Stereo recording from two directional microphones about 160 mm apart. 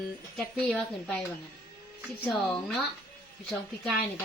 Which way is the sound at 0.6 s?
5° left (ahead or behind).